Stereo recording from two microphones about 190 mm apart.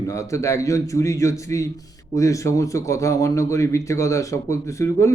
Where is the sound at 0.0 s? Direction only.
15° left (ahead or behind).